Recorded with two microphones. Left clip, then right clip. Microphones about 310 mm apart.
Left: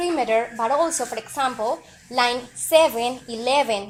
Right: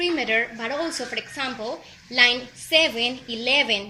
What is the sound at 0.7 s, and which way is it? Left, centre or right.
Speech, centre.